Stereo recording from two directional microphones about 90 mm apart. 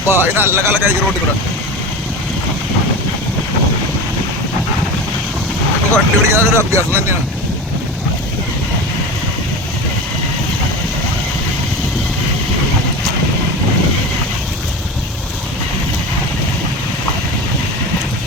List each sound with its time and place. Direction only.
0.1 s speech: 25° right (ahead or behind)
5.9 s speech: 30° right (ahead or behind)